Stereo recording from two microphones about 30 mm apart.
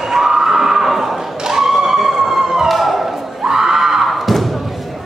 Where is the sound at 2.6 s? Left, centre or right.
Centre.